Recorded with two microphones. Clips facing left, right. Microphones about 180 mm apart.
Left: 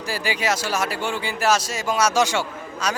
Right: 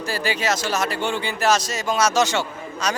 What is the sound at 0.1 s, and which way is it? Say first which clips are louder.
Speech: even; 10° left (ahead or behind).